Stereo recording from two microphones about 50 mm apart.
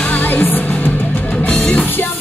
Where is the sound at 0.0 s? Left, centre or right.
Left.